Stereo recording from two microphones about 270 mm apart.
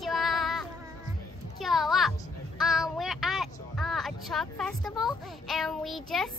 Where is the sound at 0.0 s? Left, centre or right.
Centre.